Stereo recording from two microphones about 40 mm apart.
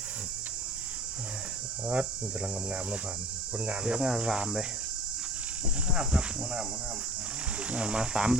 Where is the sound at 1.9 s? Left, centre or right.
Right.